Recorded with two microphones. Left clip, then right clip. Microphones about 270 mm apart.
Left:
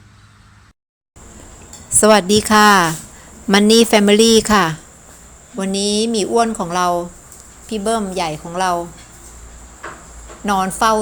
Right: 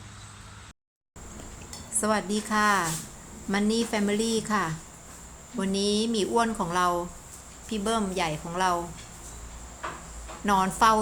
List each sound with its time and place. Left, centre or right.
2.0 s a woman's voice: left
10.4 s a woman's voice: centre